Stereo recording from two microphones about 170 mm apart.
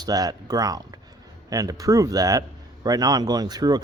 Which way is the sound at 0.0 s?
20° right (ahead or behind).